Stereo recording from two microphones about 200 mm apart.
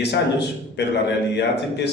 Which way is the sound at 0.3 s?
55° left (ahead or behind).